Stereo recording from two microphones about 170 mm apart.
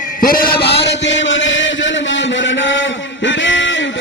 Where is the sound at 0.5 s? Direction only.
80° left.